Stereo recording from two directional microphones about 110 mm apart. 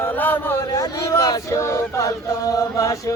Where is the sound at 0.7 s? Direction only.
30° left (ahead or behind).